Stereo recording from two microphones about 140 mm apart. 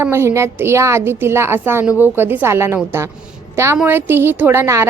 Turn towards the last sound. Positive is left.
turn(degrees=-20)  # may be behind; listen again after turning